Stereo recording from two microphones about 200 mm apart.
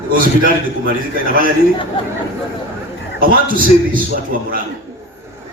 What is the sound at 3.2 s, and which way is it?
Speech, 45° right (ahead or behind).